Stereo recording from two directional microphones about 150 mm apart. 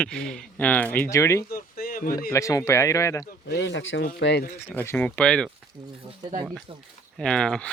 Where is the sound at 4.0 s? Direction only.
90° left.